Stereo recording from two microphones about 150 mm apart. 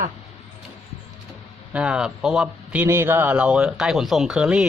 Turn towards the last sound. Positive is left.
turn(degrees=-5)  # may be behind; listen again after turning